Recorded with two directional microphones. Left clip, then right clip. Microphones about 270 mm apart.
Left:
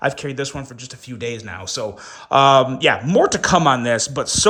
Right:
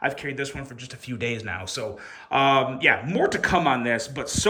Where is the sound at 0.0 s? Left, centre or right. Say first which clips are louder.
Left 5 dB; centre.